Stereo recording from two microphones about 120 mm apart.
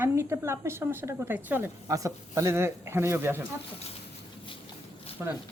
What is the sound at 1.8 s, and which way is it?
A man's voice, 30° right (ahead or behind).